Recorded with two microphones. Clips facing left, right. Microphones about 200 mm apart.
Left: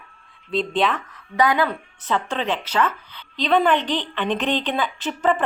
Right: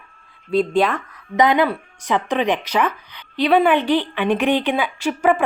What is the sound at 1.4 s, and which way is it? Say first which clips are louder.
A woman's voice: right 4 dB; 20° right (ahead or behind).